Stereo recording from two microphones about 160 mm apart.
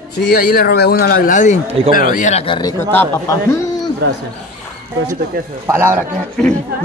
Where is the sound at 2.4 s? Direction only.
30° left (ahead or behind).